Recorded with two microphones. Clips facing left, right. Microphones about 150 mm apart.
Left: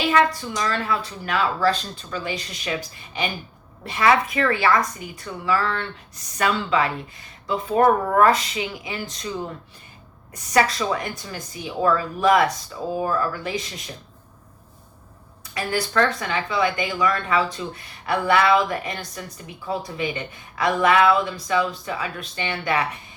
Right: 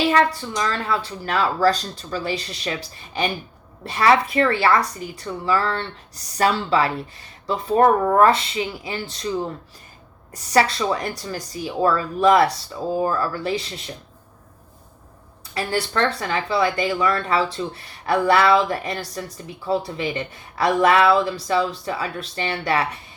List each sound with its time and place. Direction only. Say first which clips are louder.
0.3 s a woman's voice: right 1 dB; 30° right (ahead or behind)
15.5 s a woman's voice: left 1 dB; 30° right (ahead or behind)